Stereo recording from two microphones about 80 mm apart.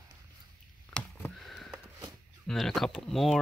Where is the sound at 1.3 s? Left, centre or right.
Centre.